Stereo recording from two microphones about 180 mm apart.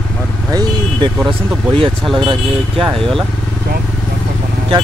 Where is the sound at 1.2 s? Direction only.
Centre (ahead or behind).